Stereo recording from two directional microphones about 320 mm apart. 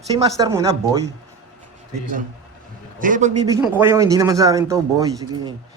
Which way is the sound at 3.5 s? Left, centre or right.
Centre.